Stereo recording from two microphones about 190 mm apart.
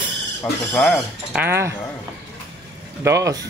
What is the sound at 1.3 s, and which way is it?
Speech, 10° right (ahead or behind).